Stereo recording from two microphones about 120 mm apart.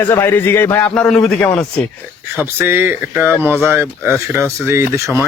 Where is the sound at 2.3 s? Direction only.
15° right (ahead or behind).